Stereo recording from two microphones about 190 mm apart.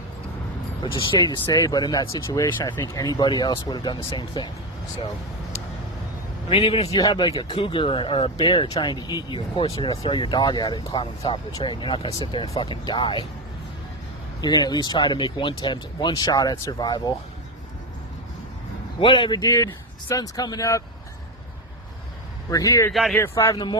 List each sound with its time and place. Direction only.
0.8 s speech: 25° left (ahead or behind)
6.5 s speech: 30° left (ahead or behind)
14.4 s speech: 20° left (ahead or behind)
18.9 s speech: 25° left (ahead or behind)
22.4 s speech: 20° left (ahead or behind)
22.9 s speech: centre (ahead or behind)
23.1 s a man's voice: 15° left (ahead or behind)